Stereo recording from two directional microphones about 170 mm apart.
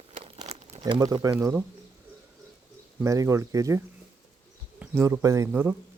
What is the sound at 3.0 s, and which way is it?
Speech, 20° right (ahead or behind).